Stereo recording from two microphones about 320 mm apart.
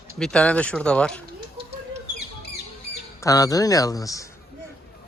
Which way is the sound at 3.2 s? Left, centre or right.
Centre.